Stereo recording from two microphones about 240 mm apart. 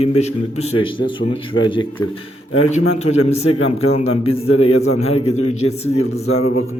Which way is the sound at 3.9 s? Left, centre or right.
Left.